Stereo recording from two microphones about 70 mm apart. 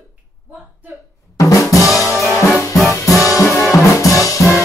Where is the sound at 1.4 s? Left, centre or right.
Left.